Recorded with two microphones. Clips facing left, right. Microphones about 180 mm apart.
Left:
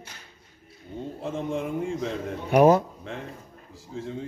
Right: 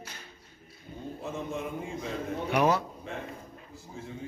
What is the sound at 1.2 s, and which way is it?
Speech, 90° left.